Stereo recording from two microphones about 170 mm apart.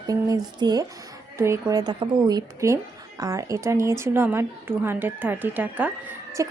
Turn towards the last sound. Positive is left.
turn(degrees=-20)  # may be behind; listen again after turning